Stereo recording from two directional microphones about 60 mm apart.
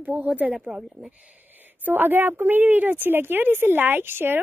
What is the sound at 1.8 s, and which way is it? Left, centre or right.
A woman's voice, right.